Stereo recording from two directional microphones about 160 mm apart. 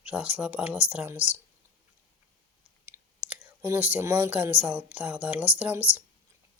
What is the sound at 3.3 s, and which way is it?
Speech, 15° right (ahead or behind).